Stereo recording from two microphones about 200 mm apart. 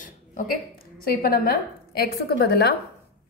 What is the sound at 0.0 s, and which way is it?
A woman's voice, 45° left (ahead or behind).